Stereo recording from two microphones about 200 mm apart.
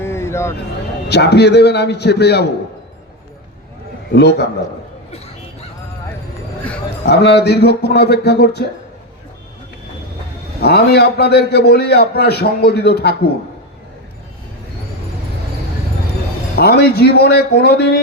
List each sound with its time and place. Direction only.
0.0 s a sound: 15° left (ahead or behind)
1.0 s a man's voice: 55° left (ahead or behind)
4.1 s a man's voice: 55° left (ahead or behind)
7.0 s a man's voice: 55° left (ahead or behind)
10.6 s a man's voice: 55° left (ahead or behind)
16.6 s a man's voice: 55° left (ahead or behind)